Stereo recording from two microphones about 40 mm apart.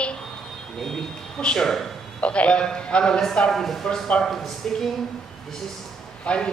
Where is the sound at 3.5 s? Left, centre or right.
Centre.